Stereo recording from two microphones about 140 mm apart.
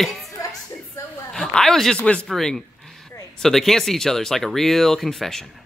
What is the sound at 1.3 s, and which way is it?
Speech, 5° left (ahead or behind).